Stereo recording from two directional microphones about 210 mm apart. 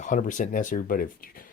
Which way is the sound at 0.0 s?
40° left (ahead or behind).